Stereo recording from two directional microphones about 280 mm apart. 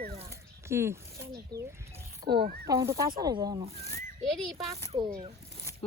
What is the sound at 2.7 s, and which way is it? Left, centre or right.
Speech, centre.